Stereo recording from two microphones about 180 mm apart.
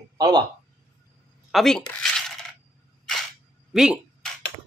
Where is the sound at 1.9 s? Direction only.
Centre (ahead or behind).